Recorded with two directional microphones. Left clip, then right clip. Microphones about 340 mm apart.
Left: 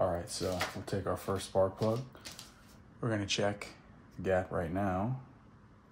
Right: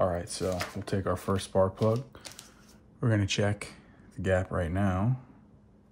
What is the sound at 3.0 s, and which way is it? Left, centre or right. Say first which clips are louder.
Speech: right 3 dB; right.